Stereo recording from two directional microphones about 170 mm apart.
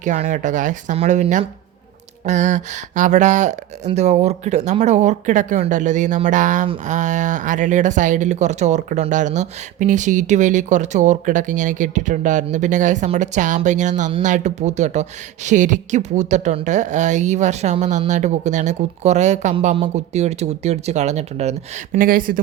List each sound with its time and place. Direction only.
0.0 s speech: 45° right (ahead or behind)
21.9 s speech: 55° right (ahead or behind)